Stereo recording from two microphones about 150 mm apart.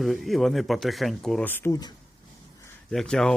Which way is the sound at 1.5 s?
15° left (ahead or behind).